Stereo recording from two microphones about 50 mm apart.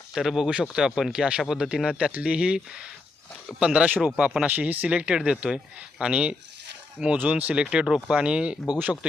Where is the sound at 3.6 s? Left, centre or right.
Centre.